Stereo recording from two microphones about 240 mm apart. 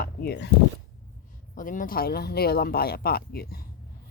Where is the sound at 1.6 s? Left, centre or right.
Left.